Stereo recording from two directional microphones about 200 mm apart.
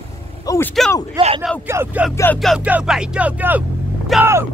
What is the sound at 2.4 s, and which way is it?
Speech, 5° right (ahead or behind).